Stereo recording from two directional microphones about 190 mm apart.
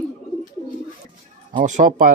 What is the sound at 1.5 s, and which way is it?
Speech, 40° right (ahead or behind).